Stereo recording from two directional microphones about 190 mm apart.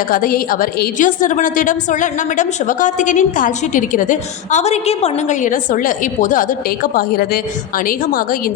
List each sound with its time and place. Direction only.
0.1 s a woman's voice: 50° left (ahead or behind)